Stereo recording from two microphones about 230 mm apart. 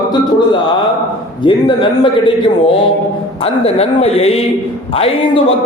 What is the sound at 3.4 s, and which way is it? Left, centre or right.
A man's voice, left.